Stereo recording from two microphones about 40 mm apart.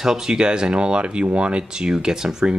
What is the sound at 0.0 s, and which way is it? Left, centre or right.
Speech, centre.